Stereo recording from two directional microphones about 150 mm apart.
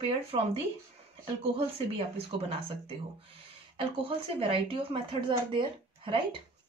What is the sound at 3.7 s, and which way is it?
A woman's voice, 35° right (ahead or behind).